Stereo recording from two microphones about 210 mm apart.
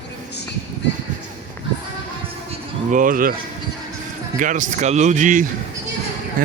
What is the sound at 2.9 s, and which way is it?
Speech, 40° right (ahead or behind).